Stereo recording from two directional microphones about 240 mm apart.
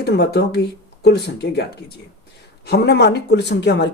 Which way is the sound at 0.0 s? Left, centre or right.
Left.